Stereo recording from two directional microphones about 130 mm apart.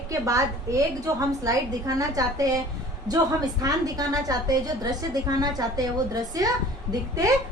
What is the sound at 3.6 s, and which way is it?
A woman's voice, 30° right (ahead or behind).